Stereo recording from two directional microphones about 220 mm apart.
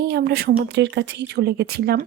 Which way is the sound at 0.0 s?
50° right (ahead or behind).